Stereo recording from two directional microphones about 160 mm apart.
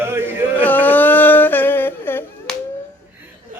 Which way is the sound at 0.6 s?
10° left (ahead or behind).